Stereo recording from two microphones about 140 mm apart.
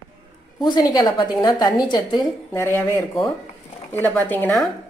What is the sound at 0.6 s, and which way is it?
A woman's voice, 30° left (ahead or behind).